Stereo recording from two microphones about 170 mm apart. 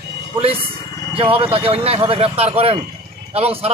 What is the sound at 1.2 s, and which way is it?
A man's voice, 35° right (ahead or behind).